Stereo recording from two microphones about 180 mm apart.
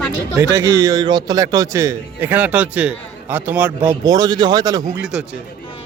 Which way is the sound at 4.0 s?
20° right (ahead or behind).